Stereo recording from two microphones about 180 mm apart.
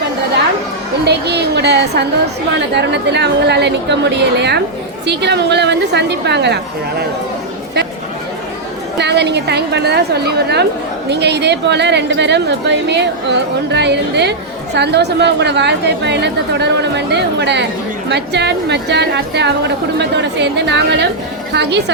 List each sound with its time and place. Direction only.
1.0 s a woman's voice: 65° right (ahead or behind)
9.0 s a woman's voice: 70° right (ahead or behind)